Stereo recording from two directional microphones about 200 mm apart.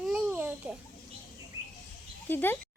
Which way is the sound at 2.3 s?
10° left (ahead or behind).